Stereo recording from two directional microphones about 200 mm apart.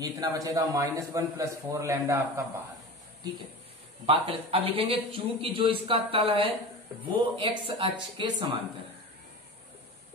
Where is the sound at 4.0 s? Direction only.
30° right (ahead or behind).